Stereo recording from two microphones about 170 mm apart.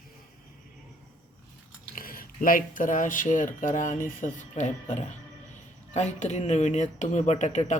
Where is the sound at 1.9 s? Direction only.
55° left (ahead or behind).